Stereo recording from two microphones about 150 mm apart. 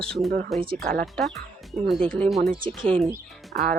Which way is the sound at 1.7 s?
Centre (ahead or behind).